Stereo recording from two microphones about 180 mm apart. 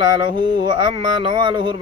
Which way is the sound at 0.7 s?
25° right (ahead or behind).